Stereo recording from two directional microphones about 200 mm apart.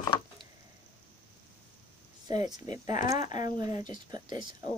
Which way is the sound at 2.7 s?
35° left (ahead or behind).